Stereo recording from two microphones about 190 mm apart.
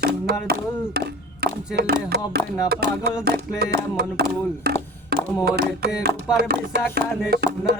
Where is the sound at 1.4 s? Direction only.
55° right (ahead or behind).